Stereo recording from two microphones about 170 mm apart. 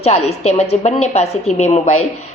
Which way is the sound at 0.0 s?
40° left (ahead or behind).